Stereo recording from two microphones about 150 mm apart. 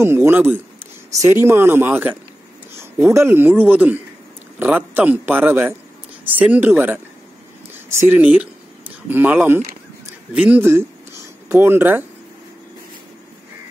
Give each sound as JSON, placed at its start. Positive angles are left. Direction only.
{"t": 0.0, "sound": "speech", "side_deg": -15}